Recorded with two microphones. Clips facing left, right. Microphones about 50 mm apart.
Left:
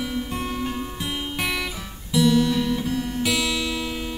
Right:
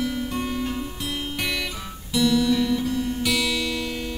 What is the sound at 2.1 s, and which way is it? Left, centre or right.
Guitar, centre.